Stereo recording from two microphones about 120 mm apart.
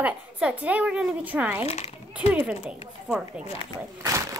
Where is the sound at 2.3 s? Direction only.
10° right (ahead or behind).